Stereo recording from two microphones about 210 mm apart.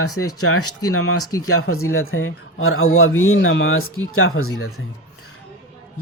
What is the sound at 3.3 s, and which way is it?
Speech, 65° left (ahead or behind).